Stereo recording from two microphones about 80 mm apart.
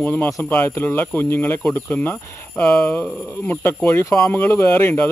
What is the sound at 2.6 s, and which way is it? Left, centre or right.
Speech, centre.